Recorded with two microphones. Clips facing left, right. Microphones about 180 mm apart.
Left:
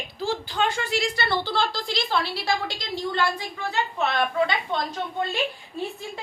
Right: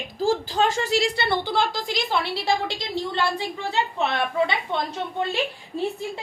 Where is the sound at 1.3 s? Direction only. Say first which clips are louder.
Right 2 dB; 15° right (ahead or behind).